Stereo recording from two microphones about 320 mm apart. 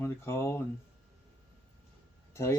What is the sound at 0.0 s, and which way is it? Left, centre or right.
Speech, centre.